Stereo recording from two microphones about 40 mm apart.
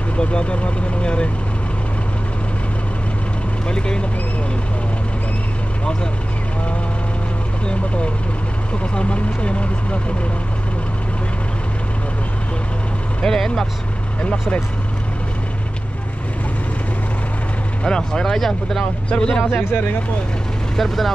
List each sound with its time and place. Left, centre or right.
0.2 s speech: left
3.6 s speech: left
8.9 s speech: left
13.2 s speech: centre
17.8 s speech: centre
19.0 s speech: centre
19.5 s speech: left
20.7 s speech: centre